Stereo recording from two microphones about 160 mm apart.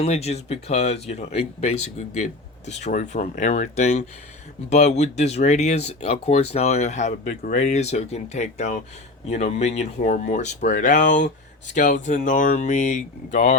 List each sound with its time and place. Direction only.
0.0 s speech: 40° left (ahead or behind)